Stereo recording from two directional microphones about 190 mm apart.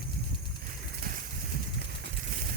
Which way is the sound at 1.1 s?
50° right (ahead or behind).